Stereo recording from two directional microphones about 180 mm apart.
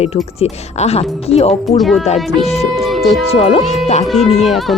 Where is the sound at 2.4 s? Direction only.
35° left (ahead or behind).